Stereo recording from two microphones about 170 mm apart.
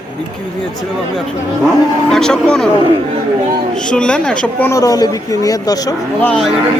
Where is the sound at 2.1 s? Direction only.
5° left (ahead or behind).